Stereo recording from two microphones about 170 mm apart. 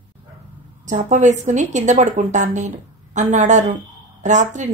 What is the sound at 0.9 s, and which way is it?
A woman's voice, 45° right (ahead or behind).